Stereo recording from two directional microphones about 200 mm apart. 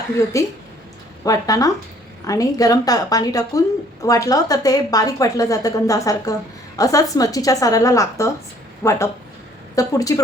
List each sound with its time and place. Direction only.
0.3 s a woman's voice: 15° left (ahead or behind)